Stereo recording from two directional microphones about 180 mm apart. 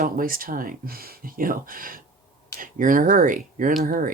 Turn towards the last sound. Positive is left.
turn(degrees=-50)  # may be behind; listen again after turning